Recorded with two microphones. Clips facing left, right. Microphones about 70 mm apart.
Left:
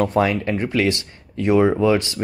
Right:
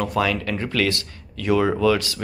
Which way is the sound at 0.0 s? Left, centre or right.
Left.